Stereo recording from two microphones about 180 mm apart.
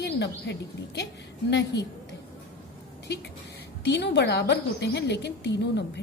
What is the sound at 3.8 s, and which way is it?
A woman's voice, 70° left (ahead or behind).